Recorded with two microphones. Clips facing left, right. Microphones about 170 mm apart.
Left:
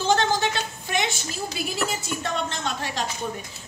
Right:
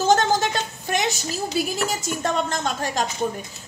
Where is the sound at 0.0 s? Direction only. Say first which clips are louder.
Right 3 dB; 45° right (ahead or behind).